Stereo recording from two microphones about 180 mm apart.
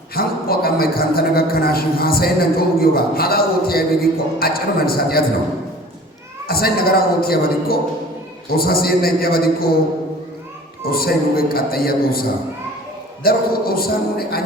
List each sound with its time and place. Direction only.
0.1 s a man's voice: 55° left (ahead or behind)
6.5 s a man's voice: 55° left (ahead or behind)
10.8 s a man's voice: 55° left (ahead or behind)
13.2 s a man's voice: 55° left (ahead or behind)